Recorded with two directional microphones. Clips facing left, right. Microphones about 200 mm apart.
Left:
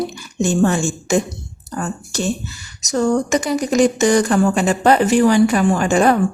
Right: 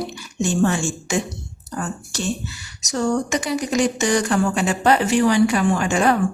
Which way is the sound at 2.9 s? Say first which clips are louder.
Left 4 dB; 45° left (ahead or behind).